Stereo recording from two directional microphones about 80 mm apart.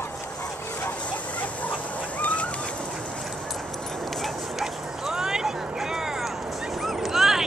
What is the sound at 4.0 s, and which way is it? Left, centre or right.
Dog, centre.